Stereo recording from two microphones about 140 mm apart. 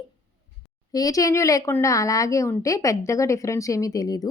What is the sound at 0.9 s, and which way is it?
Speech, 25° left (ahead or behind).